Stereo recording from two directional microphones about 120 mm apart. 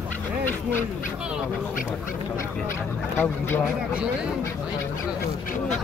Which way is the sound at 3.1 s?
20° left (ahead or behind).